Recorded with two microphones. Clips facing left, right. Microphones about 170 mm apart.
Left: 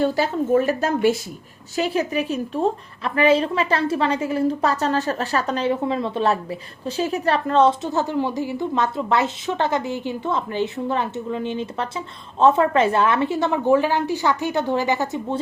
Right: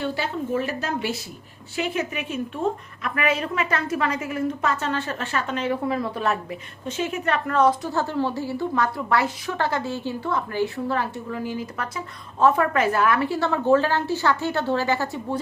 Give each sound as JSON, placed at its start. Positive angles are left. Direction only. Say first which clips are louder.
{"t": 0.0, "sound": "a woman's voice", "louder": "left 6 dB", "side_deg": 40}
{"t": 1.7, "sound": "a woman's voice", "louder": "left 5 dB", "side_deg": 35}